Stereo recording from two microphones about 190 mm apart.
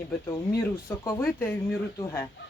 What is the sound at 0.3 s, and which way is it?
Speech, 15° left (ahead or behind).